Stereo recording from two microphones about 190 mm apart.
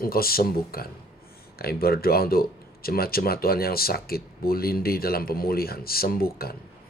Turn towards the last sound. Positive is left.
turn(degrees=50)  # may be behind; listen again after turning